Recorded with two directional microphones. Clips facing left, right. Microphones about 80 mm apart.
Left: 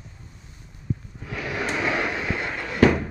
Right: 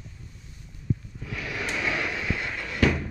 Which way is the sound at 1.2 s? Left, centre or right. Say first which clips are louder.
Left 4 dB; left.